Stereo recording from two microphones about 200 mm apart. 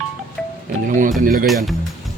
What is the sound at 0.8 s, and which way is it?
Speech, 40° right (ahead or behind).